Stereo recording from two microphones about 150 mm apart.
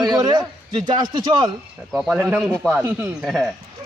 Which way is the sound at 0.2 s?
30° right (ahead or behind).